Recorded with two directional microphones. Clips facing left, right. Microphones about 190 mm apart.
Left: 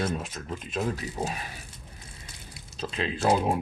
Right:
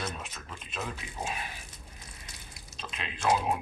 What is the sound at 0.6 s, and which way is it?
Speech, 40° left (ahead or behind).